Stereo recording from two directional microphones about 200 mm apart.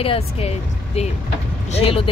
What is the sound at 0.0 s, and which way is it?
Speech, 30° left (ahead or behind).